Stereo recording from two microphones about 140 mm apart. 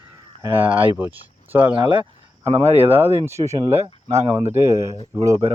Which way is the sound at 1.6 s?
35° right (ahead or behind).